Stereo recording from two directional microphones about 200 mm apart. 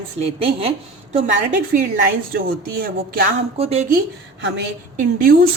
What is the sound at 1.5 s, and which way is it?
A woman's voice, 40° right (ahead or behind).